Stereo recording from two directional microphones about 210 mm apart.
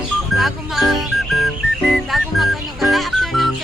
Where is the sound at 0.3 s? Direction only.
Centre (ahead or behind).